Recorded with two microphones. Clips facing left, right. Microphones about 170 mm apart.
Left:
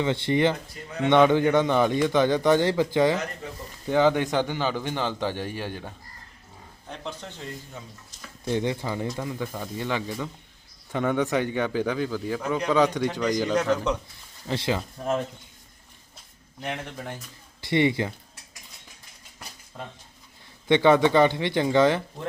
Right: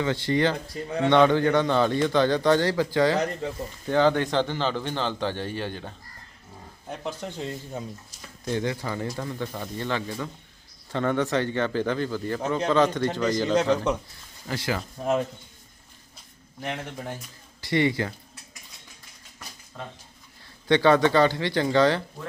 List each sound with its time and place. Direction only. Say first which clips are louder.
0.0 s a man's voice: left 1 dB; 20° left (ahead or behind)
6.8 s speech: right 4 dB; 10° right (ahead or behind)
8.4 s a man's voice: left 1 dB; 20° left (ahead or behind)
13.5 s speech: right 1 dB; 20° right (ahead or behind)
14.4 s speech: left 2 dB; 25° left (ahead or behind)
15.0 s speech: right 2 dB; centre (ahead or behind)
16.6 s speech: even; centre (ahead or behind)
17.6 s speech: left 1 dB; 20° left (ahead or behind)
20.7 s speech: left 1 dB; 20° left (ahead or behind)